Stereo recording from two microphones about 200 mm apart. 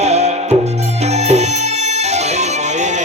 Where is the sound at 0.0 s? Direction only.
35° right (ahead or behind).